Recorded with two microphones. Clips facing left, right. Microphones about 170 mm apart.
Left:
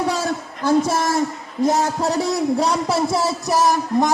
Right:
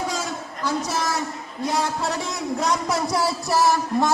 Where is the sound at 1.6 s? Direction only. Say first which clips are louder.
Left 6 dB; 45° left (ahead or behind).